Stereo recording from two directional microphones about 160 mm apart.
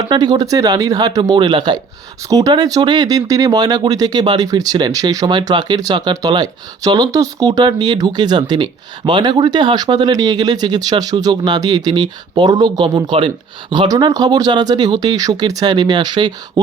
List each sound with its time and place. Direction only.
0.0 s speech: 25° right (ahead or behind)